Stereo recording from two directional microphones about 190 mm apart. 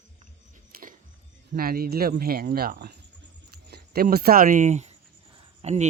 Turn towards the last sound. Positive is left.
turn(degrees=-35)  # may be behind; listen again after turning